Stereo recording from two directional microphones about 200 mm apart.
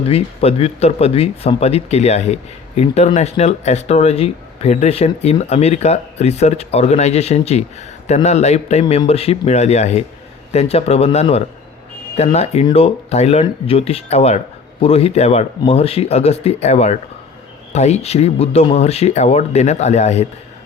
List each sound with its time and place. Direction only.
0.1 s speech: 30° left (ahead or behind)